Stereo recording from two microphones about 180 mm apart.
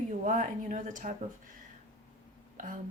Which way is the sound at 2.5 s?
50° right (ahead or behind).